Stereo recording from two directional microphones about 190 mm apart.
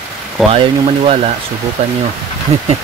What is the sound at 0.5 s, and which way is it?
Speech, 30° right (ahead or behind).